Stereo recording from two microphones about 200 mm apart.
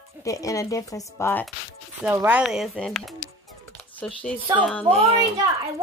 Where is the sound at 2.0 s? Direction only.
10° right (ahead or behind).